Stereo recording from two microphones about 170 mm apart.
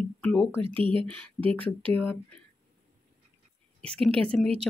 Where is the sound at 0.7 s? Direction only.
30° right (ahead or behind).